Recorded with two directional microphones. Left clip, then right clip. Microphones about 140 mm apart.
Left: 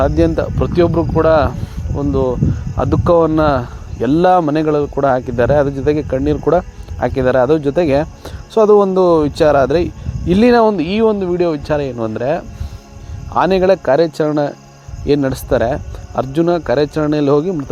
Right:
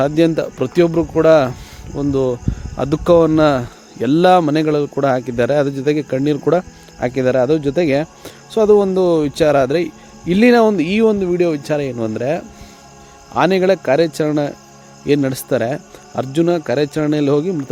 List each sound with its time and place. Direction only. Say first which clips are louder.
0.0 s speech: left 1 dB; 25° right (ahead or behind)
8.2 s speech: left 3 dB; centre (ahead or behind)
10.7 s speech: left 1 dB; 30° right (ahead or behind)
13.3 s speech: left 1 dB; centre (ahead or behind)
13.6 s speech: left 2 dB; 20° right (ahead or behind)